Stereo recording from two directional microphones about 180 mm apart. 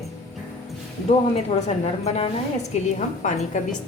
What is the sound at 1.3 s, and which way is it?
A woman's voice, 35° left (ahead or behind).